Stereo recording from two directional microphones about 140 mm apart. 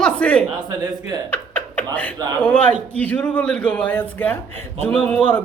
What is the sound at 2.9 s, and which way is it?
A man's voice, 10° left (ahead or behind).